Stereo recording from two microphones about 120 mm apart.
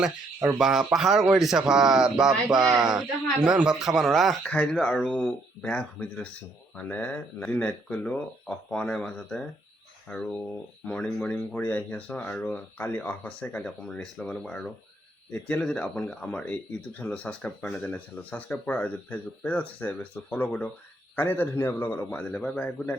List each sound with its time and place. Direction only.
0.4 s speech: centre (ahead or behind)